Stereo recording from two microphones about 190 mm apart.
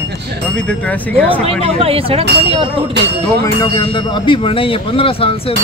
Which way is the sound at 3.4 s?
20° left (ahead or behind).